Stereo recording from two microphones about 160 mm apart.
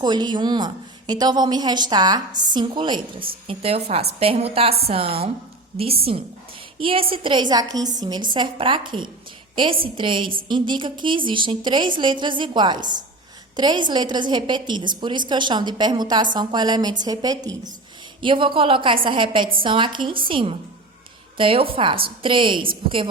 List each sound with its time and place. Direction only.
0.0 s a woman's voice: 25° right (ahead or behind)